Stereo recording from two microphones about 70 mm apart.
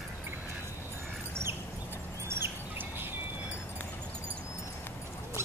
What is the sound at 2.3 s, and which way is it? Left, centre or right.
Squawk, right.